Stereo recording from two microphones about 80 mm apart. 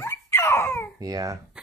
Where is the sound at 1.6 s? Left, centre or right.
Centre.